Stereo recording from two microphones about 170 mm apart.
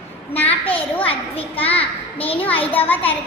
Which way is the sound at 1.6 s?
10° left (ahead or behind).